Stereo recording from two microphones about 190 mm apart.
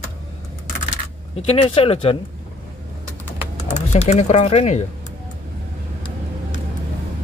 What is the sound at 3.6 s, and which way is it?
Speech, 35° left (ahead or behind).